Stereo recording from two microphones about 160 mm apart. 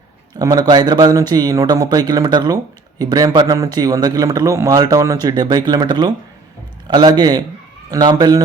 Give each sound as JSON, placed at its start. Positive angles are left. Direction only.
{"t": 0.3, "sound": "a man's voice", "side_deg": -25}